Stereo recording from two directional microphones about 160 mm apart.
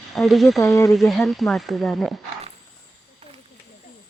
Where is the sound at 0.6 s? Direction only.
20° left (ahead or behind).